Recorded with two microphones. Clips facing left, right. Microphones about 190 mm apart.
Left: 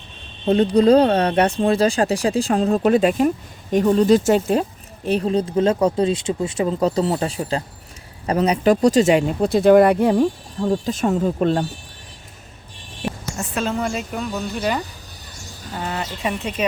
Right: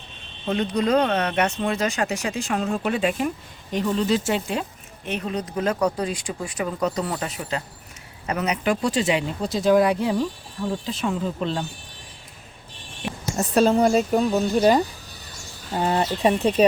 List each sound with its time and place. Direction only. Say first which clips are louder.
0.4 s speech: left 8 dB; 35° left (ahead or behind); by 10.2 s 55° left (ahead or behind)
10.8 s speech: left 6 dB; 45° left (ahead or behind)
13.3 s speech: right 8 dB; 35° right (ahead or behind)
15.8 s speech: right 5 dB; 35° right (ahead or behind)